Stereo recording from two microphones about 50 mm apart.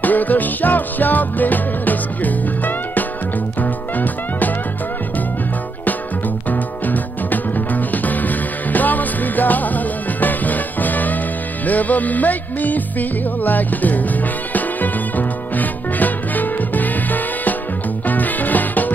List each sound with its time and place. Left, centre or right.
0.0 s music: left
6.5 s music: left